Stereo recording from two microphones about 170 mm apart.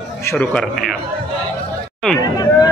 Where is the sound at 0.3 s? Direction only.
10° left (ahead or behind).